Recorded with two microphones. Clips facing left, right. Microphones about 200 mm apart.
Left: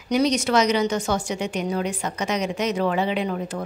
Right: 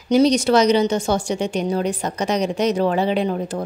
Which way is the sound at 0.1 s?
30° right (ahead or behind).